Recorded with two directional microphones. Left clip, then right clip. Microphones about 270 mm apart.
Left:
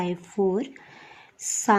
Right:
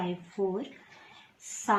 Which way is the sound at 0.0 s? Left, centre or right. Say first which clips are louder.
Left 6 dB; left.